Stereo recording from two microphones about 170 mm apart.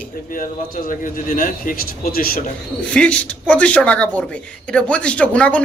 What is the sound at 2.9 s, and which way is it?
Speech, 5° left (ahead or behind).